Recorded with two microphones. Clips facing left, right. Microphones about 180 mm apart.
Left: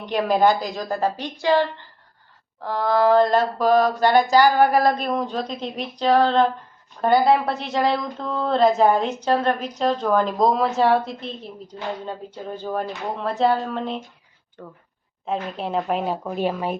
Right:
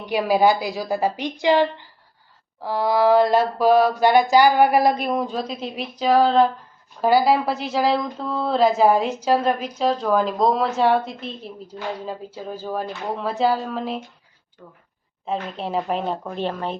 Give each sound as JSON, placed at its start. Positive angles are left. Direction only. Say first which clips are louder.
{"t": 0.1, "sound": "speech", "louder": "right 1 dB", "side_deg": -5}
{"t": 0.9, "sound": "a woman's voice", "louder": "right 2 dB", "side_deg": -15}
{"t": 5.1, "sound": "speech", "louder": "right 1 dB", "side_deg": -5}
{"t": 14.6, "sound": "speech", "louder": "left 6 dB", "side_deg": 60}
{"t": 15.2, "sound": "speech", "louder": "even", "side_deg": 0}